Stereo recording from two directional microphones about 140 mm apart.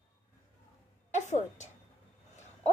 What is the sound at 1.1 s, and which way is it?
Speech, 55° left (ahead or behind).